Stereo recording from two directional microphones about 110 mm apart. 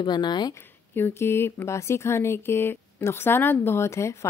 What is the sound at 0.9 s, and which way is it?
Speech, 20° left (ahead or behind).